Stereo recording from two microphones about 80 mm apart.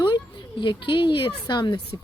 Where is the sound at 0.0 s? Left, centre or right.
Left.